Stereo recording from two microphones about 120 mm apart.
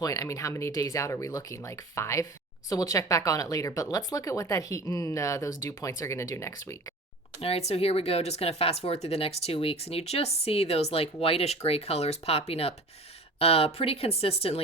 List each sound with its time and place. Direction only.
0.0 s speech: 30° left (ahead or behind)
7.4 s speech: 60° left (ahead or behind)